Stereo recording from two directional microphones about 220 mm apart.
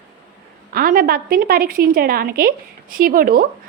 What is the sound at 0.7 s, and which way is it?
A woman's voice, 40° right (ahead or behind).